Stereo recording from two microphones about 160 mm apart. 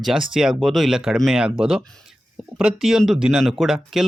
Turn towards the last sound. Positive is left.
turn(degrees=0)  # may be behind; listen again after turning